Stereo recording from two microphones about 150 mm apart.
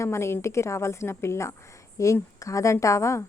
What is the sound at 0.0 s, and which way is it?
A woman's voice, 20° left (ahead or behind).